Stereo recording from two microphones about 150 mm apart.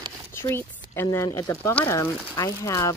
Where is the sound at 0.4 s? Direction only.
15° left (ahead or behind).